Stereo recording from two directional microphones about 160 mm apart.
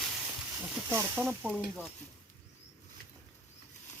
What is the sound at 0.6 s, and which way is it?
Snake, 10° right (ahead or behind).